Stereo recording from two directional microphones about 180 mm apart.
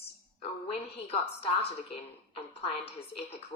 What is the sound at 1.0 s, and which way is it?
A woman's voice, 35° left (ahead or behind).